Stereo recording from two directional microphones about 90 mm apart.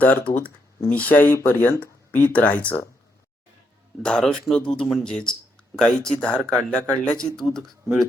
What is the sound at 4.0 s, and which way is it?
Speech, 10° left (ahead or behind).